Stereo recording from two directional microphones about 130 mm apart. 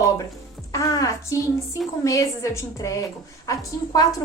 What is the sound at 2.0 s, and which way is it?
A woman's voice, 25° left (ahead or behind).